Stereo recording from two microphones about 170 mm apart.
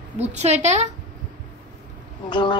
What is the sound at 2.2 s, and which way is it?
Speech, 25° left (ahead or behind).